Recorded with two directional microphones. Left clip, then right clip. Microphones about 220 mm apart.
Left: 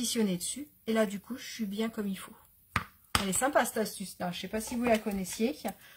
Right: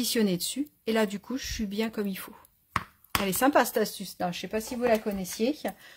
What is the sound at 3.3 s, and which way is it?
Speech, 45° right (ahead or behind).